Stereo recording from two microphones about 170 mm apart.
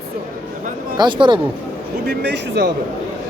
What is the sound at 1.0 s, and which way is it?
Speech, 30° right (ahead or behind).